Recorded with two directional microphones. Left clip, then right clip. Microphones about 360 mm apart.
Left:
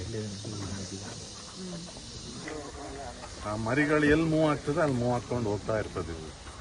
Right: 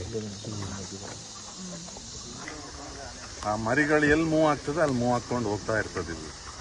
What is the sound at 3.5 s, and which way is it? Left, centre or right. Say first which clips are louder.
Speech: right 3 dB; right.